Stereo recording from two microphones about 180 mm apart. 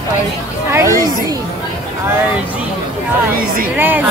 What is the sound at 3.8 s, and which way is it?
Speech, 10° right (ahead or behind).